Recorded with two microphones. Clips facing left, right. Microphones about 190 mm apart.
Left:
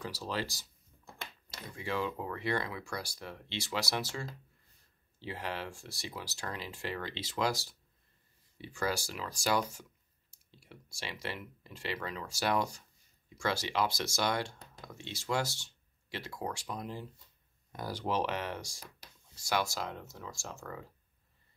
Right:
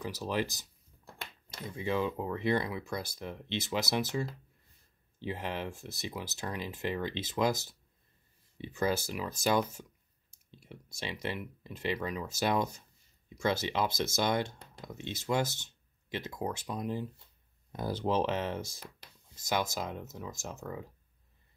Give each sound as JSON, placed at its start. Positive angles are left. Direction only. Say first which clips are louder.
{"t": 0.0, "sound": "speech", "louder": "right 4 dB", "side_deg": -20}
{"t": 1.8, "sound": "speech", "louder": "right 3 dB", "side_deg": -20}